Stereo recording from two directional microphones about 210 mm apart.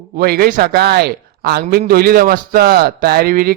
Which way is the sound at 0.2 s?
45° right (ahead or behind).